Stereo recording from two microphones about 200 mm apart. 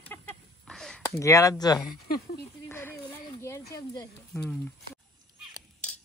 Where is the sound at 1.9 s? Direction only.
50° left (ahead or behind).